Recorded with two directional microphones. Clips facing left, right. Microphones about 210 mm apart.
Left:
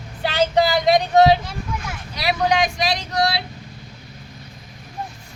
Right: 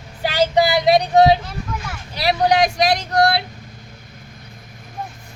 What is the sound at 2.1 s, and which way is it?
Speech, 30° right (ahead or behind).